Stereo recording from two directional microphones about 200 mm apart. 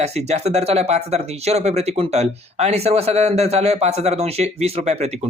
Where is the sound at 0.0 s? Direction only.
35° right (ahead or behind).